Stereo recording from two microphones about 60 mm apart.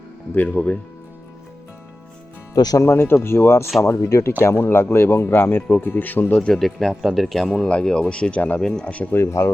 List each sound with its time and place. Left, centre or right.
0.3 s speech: left
2.8 s speech: left
4.4 s speech: left
6.6 s speech: centre
7.5 s speech: centre
9.1 s speech: left